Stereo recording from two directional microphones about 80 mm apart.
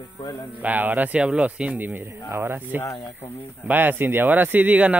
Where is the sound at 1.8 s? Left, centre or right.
Right.